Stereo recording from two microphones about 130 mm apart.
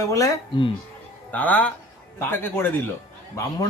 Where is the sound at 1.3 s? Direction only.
10° left (ahead or behind).